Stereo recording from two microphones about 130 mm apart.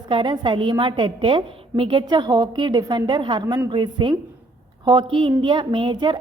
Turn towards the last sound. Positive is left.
turn(degrees=-35)  # may be behind; listen again after turning